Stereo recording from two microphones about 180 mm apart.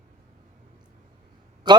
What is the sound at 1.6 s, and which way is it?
Speech, 25° right (ahead or behind).